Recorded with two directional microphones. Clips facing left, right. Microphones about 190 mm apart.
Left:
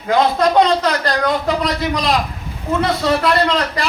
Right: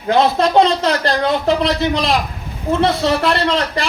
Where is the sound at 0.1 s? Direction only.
25° right (ahead or behind).